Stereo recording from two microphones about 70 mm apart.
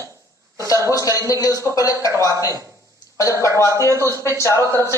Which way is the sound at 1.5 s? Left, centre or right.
Right.